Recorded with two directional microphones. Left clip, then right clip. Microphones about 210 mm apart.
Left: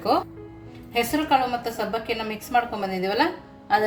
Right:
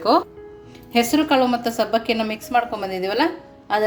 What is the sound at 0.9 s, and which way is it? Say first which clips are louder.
Speech: right 3 dB; 40° right (ahead or behind).